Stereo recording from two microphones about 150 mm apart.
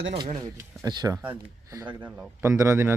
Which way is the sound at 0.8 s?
25° right (ahead or behind).